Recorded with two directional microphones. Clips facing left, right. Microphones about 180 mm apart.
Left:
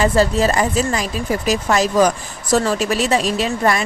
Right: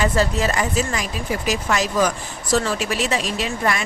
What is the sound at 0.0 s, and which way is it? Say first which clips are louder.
A woman's voice: left 5 dB; 35° left (ahead or behind).